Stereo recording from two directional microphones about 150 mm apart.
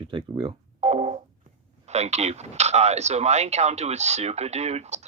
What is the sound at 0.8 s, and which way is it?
Telephone dialing, 45° right (ahead or behind).